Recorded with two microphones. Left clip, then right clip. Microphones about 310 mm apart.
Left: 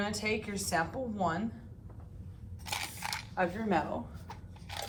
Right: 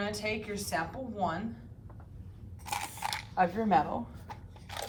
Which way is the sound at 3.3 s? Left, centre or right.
Right.